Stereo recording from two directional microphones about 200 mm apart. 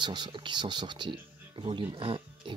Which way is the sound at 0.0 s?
20° right (ahead or behind).